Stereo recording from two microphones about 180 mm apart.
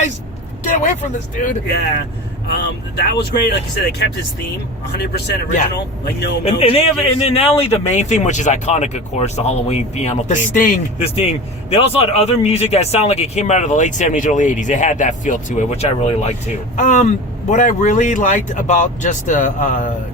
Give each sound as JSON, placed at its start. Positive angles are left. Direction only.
{"t": 0.7, "sound": "speech", "side_deg": 40}
{"t": 2.5, "sound": "speech", "side_deg": 65}
{"t": 4.9, "sound": "speech", "side_deg": 65}
{"t": 6.4, "sound": "speech", "side_deg": 30}
{"t": 11.0, "sound": "speech", "side_deg": 35}